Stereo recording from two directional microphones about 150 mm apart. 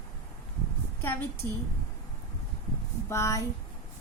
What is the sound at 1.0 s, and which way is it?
Speech, 15° left (ahead or behind).